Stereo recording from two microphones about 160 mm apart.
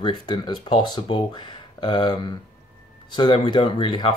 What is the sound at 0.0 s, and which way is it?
Speech, 25° left (ahead or behind).